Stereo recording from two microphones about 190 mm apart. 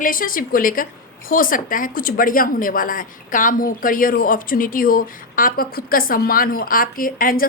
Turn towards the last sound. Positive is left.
turn(degrees=50)  # may be behind; listen again after turning